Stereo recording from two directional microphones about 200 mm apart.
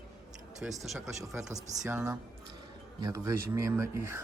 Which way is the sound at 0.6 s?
Centre (ahead or behind).